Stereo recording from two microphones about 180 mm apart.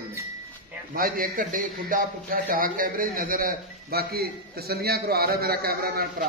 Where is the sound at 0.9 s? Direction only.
55° right (ahead or behind).